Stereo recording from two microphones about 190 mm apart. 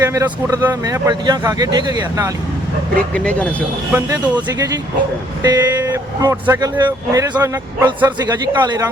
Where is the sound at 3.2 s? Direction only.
5° left (ahead or behind).